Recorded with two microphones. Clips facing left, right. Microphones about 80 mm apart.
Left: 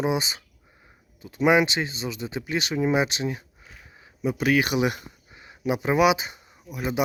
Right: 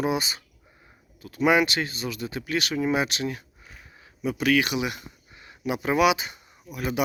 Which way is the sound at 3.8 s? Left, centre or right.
Centre.